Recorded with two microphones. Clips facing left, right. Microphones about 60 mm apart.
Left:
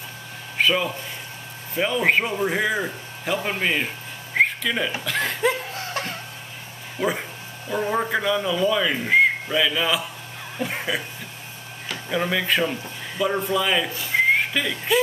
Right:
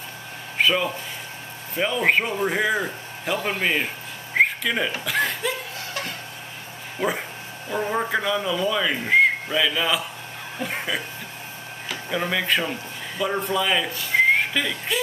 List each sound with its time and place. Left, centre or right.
0.6 s a man's voice: centre
4.4 s a sound: centre
5.0 s speech: centre
5.4 s chuckle: left
7.0 s speech: centre
14.1 s whistling: centre
14.5 s speech: centre